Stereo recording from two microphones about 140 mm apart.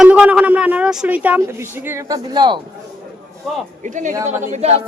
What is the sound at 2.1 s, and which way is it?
Speech, 35° right (ahead or behind).